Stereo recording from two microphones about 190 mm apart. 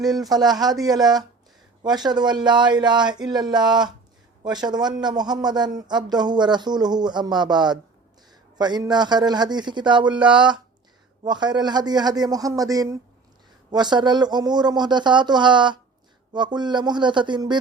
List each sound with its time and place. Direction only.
0.1 s a man's voice: 20° right (ahead or behind)